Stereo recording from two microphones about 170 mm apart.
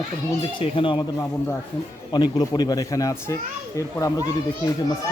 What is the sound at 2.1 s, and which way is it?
A man's voice, 25° left (ahead or behind).